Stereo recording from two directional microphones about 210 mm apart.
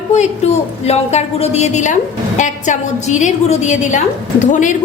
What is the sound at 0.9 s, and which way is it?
A woman's voice, 30° left (ahead or behind).